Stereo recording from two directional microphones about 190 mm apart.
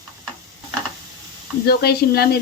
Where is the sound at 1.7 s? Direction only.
55° left (ahead or behind).